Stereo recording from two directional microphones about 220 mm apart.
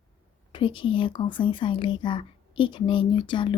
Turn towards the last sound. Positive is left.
turn(degrees=20)  # may be behind; listen again after turning